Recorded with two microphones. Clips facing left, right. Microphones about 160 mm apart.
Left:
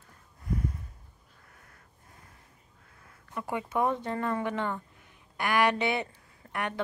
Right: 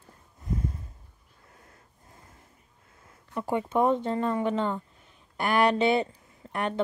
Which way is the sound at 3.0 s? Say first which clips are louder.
Right 4 dB; 25° right (ahead or behind).